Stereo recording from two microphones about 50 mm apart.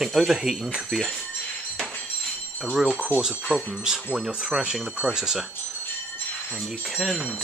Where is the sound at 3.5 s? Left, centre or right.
Right.